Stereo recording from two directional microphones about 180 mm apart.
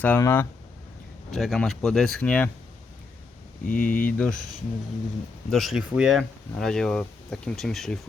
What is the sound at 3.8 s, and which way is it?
Speech, 10° left (ahead or behind).